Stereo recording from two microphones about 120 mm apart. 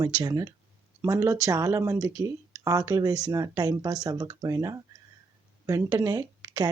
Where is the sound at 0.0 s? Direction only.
35° right (ahead or behind).